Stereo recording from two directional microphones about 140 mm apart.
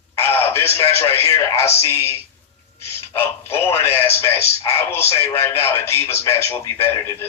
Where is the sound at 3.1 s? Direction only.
15° left (ahead or behind).